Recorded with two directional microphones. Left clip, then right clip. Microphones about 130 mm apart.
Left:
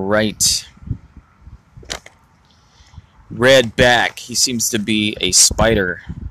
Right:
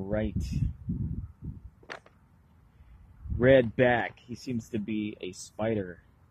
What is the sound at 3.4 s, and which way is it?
Speech, 30° left (ahead or behind).